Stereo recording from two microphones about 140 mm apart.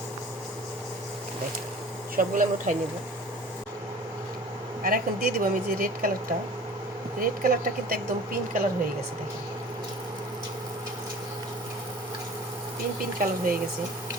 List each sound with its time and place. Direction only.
2.1 s speech: 70° right (ahead or behind)
4.8 s a woman's voice: 90° right
7.2 s a woman's voice: 90° right
13.1 s a woman's voice: 90° right